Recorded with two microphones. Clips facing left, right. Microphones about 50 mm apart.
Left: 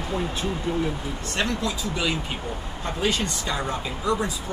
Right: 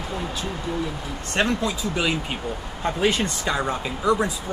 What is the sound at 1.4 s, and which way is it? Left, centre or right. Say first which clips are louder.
Speech: right 4 dB; right.